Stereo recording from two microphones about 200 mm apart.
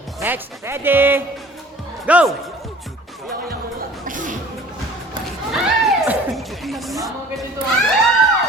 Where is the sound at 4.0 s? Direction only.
40° right (ahead or behind).